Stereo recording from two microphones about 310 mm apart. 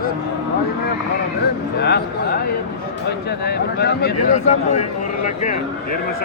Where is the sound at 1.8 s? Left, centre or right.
Left.